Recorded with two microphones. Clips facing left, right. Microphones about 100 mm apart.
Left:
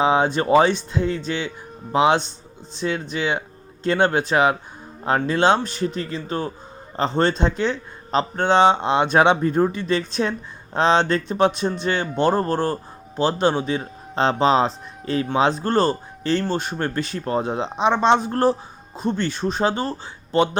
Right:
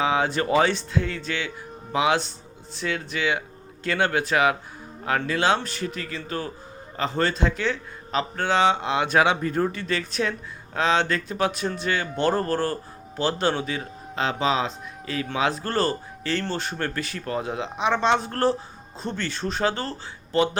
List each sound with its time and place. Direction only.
0.0 s speech: 25° left (ahead or behind)